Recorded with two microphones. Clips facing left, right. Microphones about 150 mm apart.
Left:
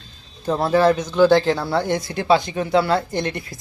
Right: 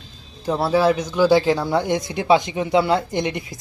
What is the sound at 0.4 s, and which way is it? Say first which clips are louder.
Speech: left 1 dB; 5° right (ahead or behind).